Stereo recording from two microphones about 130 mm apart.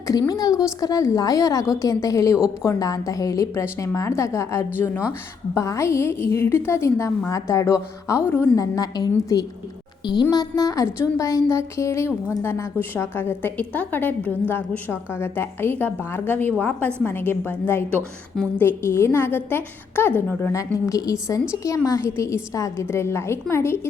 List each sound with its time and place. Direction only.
0.1 s a woman's voice: 30° left (ahead or behind)
20.6 s a woman's voice: 25° left (ahead or behind)